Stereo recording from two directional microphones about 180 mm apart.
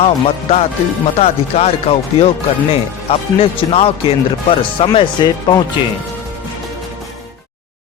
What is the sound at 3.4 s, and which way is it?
Speech, 30° left (ahead or behind).